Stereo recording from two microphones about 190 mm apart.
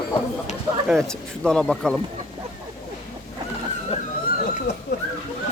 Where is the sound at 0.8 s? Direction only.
Centre (ahead or behind).